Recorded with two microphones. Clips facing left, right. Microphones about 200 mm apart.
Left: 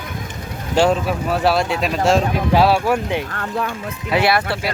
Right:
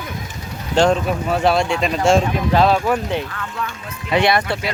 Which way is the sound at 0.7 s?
5° left (ahead or behind).